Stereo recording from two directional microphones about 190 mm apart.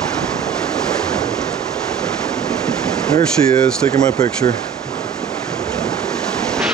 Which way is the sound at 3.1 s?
15° left (ahead or behind).